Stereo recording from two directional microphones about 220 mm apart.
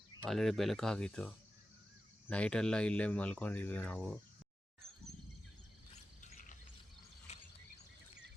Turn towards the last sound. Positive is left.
turn(degrees=30)  # may be behind; listen again after turning